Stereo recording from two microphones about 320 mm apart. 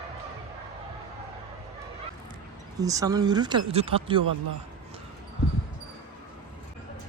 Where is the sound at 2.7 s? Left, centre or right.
Centre.